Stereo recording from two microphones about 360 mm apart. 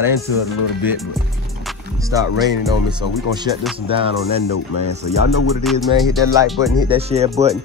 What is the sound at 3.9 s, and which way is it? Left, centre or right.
Speech, centre.